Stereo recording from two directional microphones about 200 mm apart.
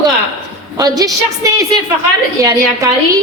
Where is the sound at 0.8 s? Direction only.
20° right (ahead or behind).